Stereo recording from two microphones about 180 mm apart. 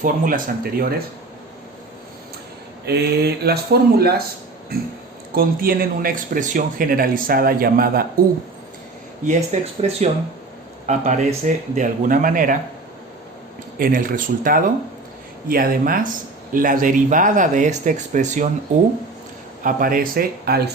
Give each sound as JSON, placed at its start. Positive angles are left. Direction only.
{"t": 0.0, "sound": "speech", "side_deg": -50}
{"t": 2.8, "sound": "speech", "side_deg": -65}
{"t": 5.3, "sound": "speech", "side_deg": -55}
{"t": 9.2, "sound": "speech", "side_deg": -40}
{"t": 13.7, "sound": "speech", "side_deg": -50}
{"t": 19.6, "sound": "speech", "side_deg": -50}